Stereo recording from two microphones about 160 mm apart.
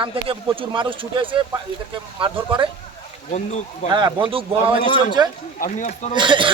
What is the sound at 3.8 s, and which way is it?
Speech, 30° right (ahead or behind).